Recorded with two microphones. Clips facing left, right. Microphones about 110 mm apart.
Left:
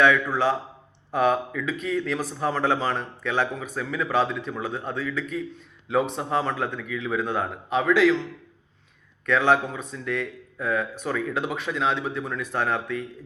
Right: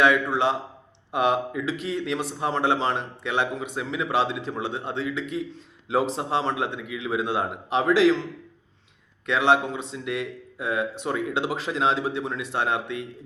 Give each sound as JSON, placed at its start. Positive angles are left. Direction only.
{"t": 0.0, "sound": "a man's voice", "side_deg": -25}
{"t": 9.2, "sound": "speech", "side_deg": -25}